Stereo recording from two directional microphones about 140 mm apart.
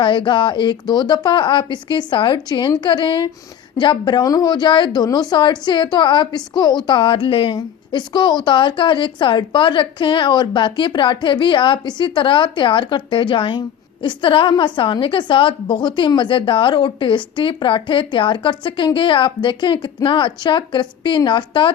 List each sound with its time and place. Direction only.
0.0 s speech: 35° left (ahead or behind)